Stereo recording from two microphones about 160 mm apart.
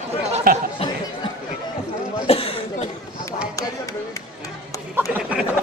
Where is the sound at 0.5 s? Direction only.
60° right (ahead or behind).